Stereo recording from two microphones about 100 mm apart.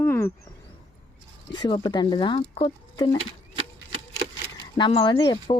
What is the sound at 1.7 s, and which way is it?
Speech, 50° left (ahead or behind).